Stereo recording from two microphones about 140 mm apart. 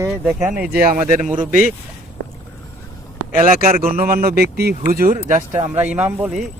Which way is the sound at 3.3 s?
90° right.